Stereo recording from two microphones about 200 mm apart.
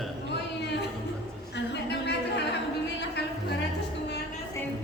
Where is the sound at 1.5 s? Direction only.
60° left (ahead or behind).